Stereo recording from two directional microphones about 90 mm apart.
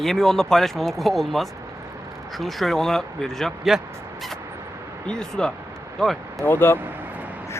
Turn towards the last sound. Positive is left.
turn(degrees=-20)  # may be behind; listen again after turning